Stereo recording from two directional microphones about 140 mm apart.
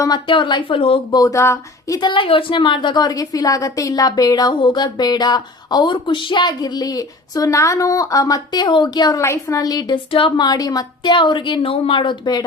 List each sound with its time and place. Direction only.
0.0 s speech: 30° left (ahead or behind)
1.2 s speech: 20° left (ahead or behind)